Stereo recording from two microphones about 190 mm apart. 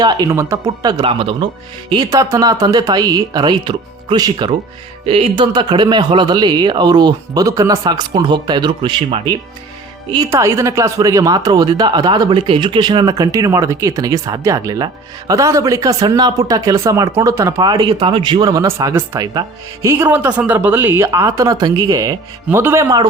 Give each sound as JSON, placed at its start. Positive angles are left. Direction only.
{"t": 0.0, "sound": "speech", "side_deg": -20}
{"t": 10.1, "sound": "speech", "side_deg": -15}